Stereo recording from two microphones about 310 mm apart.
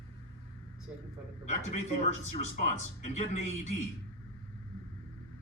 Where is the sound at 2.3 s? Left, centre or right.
Left.